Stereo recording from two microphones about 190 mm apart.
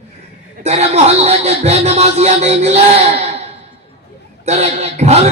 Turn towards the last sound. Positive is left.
turn(degrees=-35)  # may be behind; listen again after turning